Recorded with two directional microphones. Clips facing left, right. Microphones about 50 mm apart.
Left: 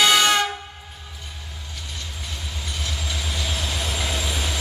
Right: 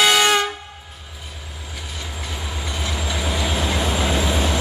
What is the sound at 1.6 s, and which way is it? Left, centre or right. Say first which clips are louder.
Train: right 4 dB; centre.